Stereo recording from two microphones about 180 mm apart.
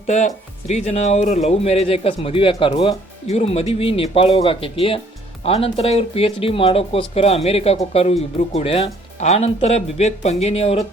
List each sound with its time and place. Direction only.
0.1 s speech: 40° left (ahead or behind)